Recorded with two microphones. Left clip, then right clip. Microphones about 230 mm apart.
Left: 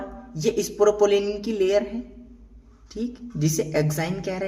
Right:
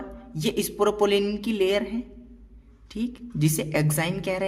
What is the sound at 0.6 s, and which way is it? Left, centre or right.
Speech, right.